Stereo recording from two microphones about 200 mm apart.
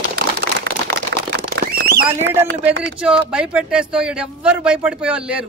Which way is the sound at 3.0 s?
5° right (ahead or behind).